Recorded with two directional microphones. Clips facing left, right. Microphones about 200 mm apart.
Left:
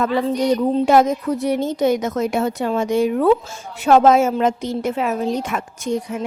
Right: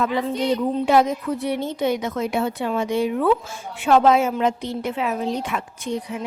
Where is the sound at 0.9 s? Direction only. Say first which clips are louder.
Left 2 dB; 45° left (ahead or behind).